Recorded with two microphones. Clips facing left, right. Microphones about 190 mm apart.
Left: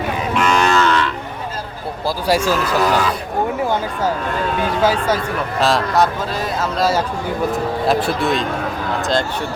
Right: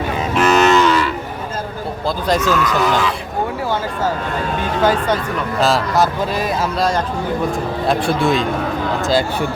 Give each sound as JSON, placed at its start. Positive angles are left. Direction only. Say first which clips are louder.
{"t": 0.3, "sound": "livestock", "louder": "right 4 dB", "side_deg": -20}
{"t": 2.0, "sound": "speech", "louder": "even", "side_deg": 10}
{"t": 2.6, "sound": "speech", "louder": "even", "side_deg": 40}
{"t": 4.8, "sound": "speech", "louder": "right 2 dB", "side_deg": 10}